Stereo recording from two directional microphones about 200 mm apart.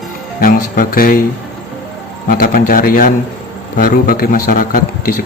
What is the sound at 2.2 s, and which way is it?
A man's voice, 45° left (ahead or behind).